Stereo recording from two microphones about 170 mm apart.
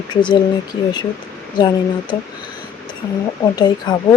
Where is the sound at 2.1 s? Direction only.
25° left (ahead or behind).